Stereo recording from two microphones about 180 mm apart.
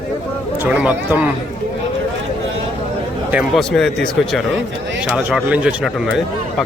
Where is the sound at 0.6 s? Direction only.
10° right (ahead or behind).